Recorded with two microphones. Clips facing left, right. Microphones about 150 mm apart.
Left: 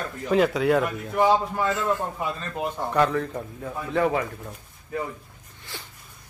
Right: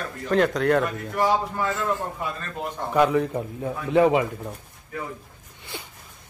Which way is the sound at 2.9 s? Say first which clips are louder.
Right 4 dB; 15° right (ahead or behind).